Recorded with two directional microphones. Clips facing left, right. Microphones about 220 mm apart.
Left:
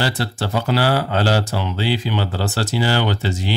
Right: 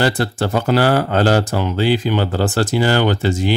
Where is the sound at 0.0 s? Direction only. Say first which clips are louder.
Right 5 dB; 50° right (ahead or behind).